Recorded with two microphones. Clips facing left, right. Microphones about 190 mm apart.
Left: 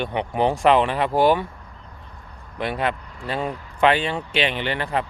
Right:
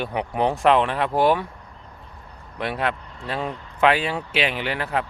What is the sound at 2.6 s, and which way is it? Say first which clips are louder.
Speech: left 1 dB; centre (ahead or behind).